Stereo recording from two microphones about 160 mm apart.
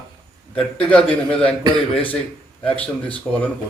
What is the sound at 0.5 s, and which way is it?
A man's voice, 5° left (ahead or behind).